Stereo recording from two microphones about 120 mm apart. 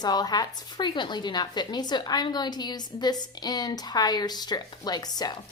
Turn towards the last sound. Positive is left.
turn(degrees=35)  # may be behind; listen again after turning